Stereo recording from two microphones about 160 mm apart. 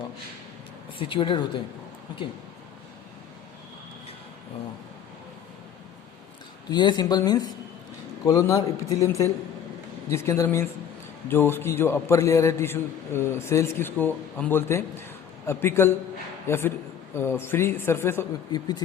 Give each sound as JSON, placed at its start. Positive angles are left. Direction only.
{"t": 0.9, "sound": "speech", "side_deg": 30}
{"t": 6.7, "sound": "a man's voice", "side_deg": 25}